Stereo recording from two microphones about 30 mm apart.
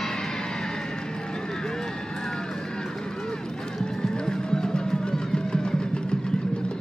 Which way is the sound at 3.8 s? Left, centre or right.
Left.